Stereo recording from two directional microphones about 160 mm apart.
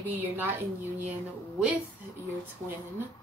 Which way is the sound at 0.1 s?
10° right (ahead or behind).